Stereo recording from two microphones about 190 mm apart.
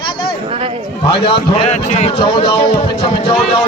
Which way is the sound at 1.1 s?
25° left (ahead or behind).